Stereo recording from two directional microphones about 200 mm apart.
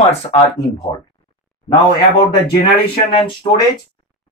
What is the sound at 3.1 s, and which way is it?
Speech, 25° left (ahead or behind).